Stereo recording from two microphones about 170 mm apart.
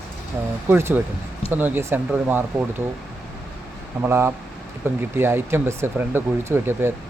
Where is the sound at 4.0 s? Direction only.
15° right (ahead or behind).